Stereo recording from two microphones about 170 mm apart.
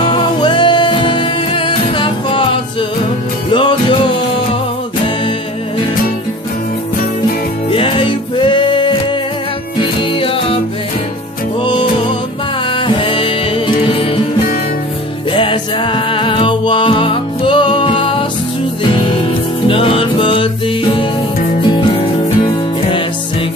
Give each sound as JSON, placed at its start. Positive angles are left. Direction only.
{"t": 0.0, "sound": "music", "side_deg": 30}
{"t": 3.5, "sound": "music", "side_deg": 30}
{"t": 7.7, "sound": "music", "side_deg": 30}
{"t": 12.7, "sound": "music", "side_deg": 30}
{"t": 15.3, "sound": "music", "side_deg": 30}
{"t": 19.7, "sound": "music", "side_deg": 30}